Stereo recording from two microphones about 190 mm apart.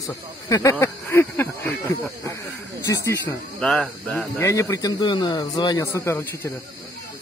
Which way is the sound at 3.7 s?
5° left (ahead or behind).